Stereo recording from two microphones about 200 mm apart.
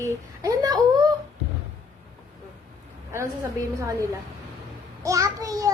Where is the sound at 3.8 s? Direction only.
15° right (ahead or behind).